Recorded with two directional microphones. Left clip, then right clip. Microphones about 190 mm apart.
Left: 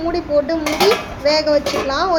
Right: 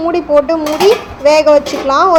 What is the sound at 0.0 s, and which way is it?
A woman's voice, 20° right (ahead or behind).